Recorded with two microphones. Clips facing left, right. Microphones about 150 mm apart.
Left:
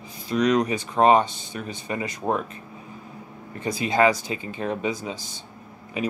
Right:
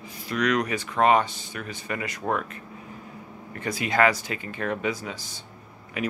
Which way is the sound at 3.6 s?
25° left (ahead or behind).